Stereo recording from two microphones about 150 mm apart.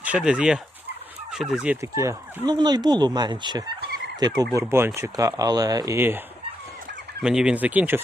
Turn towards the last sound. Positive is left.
turn(degrees=-10)  # may be behind; listen again after turning